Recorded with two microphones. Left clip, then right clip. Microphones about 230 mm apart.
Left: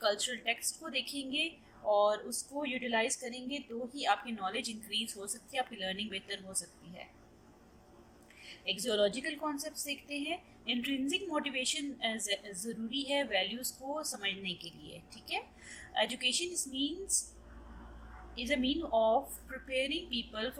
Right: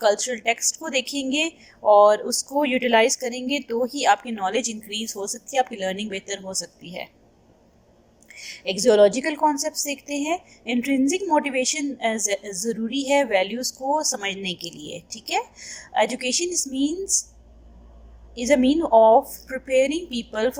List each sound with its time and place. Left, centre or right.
0.0 s a woman's voice: right
8.4 s a woman's voice: right
18.3 s a woman's voice: right